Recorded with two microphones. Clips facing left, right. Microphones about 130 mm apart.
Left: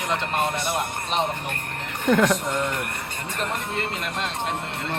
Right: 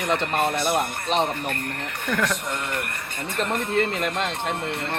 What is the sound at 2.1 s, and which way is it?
Speech, 25° left (ahead or behind).